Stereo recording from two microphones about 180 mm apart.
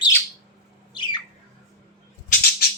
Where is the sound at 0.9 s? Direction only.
25° left (ahead or behind).